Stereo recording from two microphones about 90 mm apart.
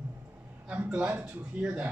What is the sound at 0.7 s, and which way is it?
Speech, 15° right (ahead or behind).